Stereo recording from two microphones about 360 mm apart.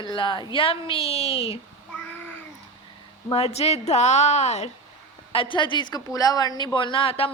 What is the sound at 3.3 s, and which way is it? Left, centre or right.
A woman's voice, centre.